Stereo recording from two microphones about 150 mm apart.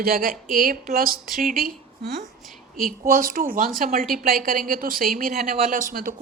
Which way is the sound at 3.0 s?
70° right (ahead or behind).